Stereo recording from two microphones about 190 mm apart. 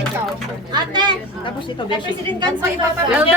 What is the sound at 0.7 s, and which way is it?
Speech, 20° right (ahead or behind).